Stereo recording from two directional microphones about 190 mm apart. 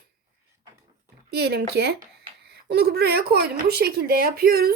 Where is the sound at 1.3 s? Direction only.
55° right (ahead or behind).